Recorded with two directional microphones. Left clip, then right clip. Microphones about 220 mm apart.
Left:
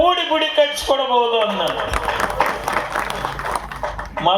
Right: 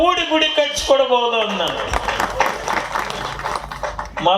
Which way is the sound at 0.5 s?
50° right (ahead or behind).